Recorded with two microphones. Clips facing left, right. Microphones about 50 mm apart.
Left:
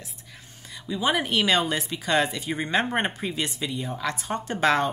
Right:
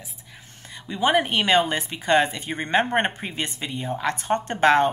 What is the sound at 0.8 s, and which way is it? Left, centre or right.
Speech, right.